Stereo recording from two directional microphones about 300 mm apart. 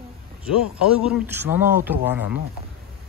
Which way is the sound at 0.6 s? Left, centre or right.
Centre.